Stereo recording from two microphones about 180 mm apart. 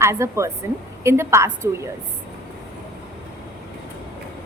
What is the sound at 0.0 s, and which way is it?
A woman's voice, 15° right (ahead or behind).